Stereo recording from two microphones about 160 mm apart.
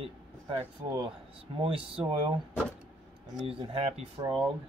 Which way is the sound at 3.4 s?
35° right (ahead or behind).